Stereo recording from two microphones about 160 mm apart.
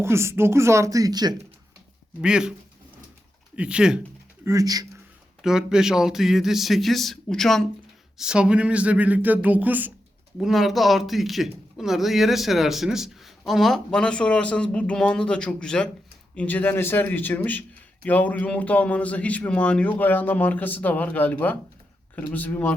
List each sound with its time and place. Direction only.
0.0 s speech: 15° right (ahead or behind)
2.2 s speech: 5° right (ahead or behind)
4.4 s speech: 20° right (ahead or behind)
5.4 s a man's voice: 5° right (ahead or behind)